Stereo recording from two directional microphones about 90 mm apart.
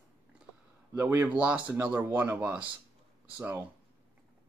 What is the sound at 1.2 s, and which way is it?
Speech, 15° right (ahead or behind).